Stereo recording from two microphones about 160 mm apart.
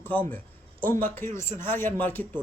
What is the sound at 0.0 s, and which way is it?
A man's voice, 10° left (ahead or behind).